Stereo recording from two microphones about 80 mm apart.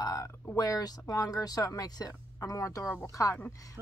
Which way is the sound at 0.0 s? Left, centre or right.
Left.